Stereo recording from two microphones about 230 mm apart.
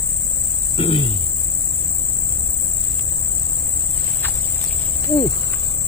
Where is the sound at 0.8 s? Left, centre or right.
Left.